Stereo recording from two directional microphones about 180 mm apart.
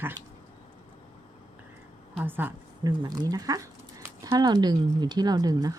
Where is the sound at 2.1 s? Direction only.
10° right (ahead or behind).